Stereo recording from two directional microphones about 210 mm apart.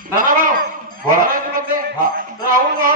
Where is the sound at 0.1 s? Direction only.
40° right (ahead or behind).